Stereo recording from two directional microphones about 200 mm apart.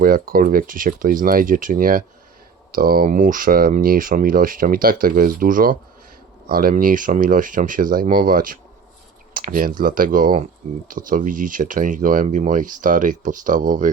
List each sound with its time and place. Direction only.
0.0 s speech: 45° right (ahead or behind)